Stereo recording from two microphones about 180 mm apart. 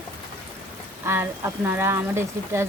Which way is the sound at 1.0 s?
15° right (ahead or behind).